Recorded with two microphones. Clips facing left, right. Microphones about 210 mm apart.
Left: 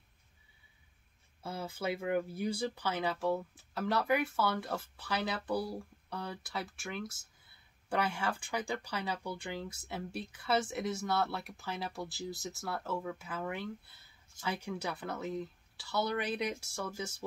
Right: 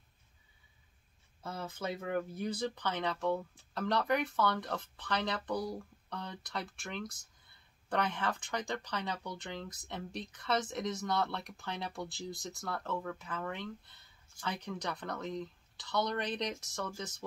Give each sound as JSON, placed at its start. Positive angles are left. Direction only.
{"t": 1.4, "sound": "speech", "side_deg": 10}